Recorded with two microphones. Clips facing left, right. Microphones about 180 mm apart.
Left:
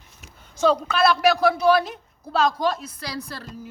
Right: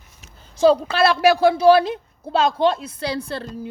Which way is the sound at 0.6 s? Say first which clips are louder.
Right 4 dB; 30° right (ahead or behind).